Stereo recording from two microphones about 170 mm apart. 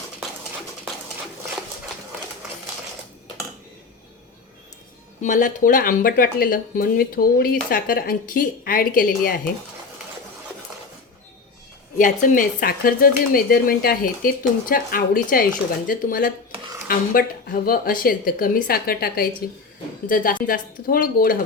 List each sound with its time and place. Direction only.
5.2 s speech: 50° left (ahead or behind)
11.9 s speech: 50° left (ahead or behind)